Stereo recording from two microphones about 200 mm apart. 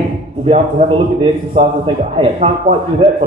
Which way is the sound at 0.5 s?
30° right (ahead or behind).